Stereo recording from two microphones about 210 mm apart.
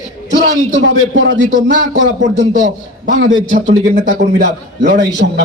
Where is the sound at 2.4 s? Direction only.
40° right (ahead or behind).